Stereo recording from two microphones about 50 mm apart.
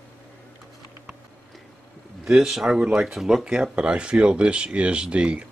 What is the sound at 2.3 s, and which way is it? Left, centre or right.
Speech, centre.